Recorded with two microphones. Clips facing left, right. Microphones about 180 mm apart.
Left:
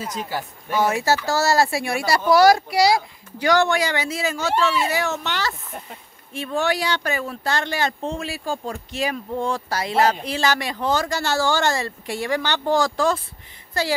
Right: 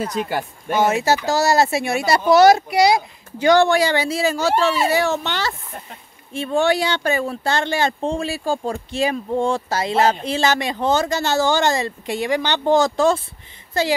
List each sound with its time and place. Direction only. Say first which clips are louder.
0.0 s speech: right 5 dB; 60° right (ahead or behind)
0.7 s speech: right 2 dB; 20° right (ahead or behind)